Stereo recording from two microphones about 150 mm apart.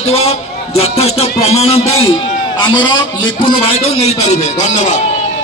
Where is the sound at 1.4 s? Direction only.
45° left (ahead or behind).